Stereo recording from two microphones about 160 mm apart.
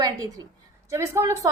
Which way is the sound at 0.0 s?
25° right (ahead or behind).